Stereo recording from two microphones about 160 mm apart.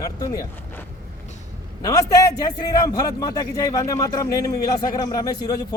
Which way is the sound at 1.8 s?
20° left (ahead or behind).